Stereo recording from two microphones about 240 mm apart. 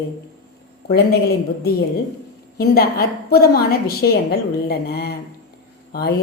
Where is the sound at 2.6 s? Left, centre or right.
Left.